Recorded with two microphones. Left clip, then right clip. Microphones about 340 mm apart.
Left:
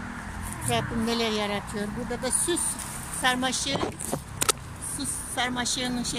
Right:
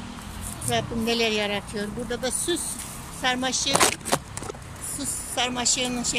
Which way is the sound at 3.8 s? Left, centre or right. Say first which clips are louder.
Right 9 dB; right.